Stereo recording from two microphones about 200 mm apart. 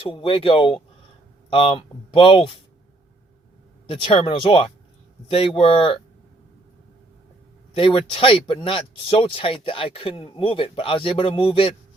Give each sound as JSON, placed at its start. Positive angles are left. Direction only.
{"t": 0.1, "sound": "speech", "side_deg": 25}
{"t": 3.8, "sound": "speech", "side_deg": 25}
{"t": 7.8, "sound": "speech", "side_deg": 25}